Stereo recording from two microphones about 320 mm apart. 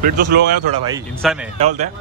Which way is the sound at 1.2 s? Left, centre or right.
Centre.